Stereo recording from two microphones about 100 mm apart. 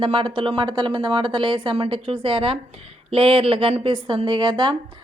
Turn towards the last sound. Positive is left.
turn(degrees=-50)  # may be behind; listen again after turning